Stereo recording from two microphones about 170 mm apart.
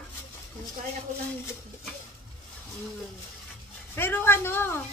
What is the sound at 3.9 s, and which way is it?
Dishes, 15° left (ahead or behind).